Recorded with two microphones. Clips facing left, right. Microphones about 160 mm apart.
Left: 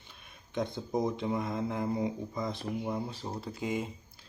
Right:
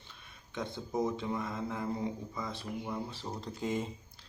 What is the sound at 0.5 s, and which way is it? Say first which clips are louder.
Speech: left 3 dB; 15° left (ahead or behind).